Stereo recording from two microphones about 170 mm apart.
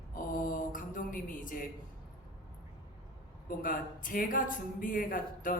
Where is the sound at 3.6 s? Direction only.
55° left (ahead or behind).